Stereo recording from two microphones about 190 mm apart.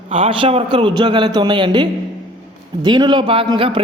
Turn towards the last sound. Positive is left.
turn(degrees=-30)  # may be behind; listen again after turning